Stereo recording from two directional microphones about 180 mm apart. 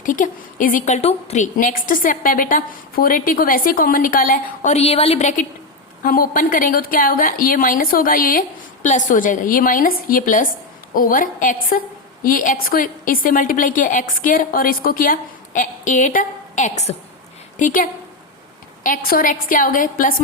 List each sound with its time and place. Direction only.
0.0 s a woman's voice: 45° left (ahead or behind)
6.0 s a woman's voice: 55° left (ahead or behind)